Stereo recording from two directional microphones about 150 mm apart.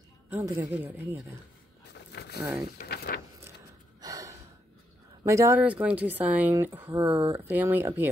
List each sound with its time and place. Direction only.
0.3 s speech: 10° right (ahead or behind)
2.1 s a sound: 90° left
2.9 s speech: 90° left
4.0 s gasp: 20° right (ahead or behind)
5.2 s speech: 20° right (ahead or behind)
7.2 s speech: 35° right (ahead or behind)
7.4 s speech: 10° right (ahead or behind)